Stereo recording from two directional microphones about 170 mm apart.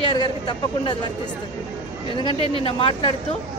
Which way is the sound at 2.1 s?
30° left (ahead or behind).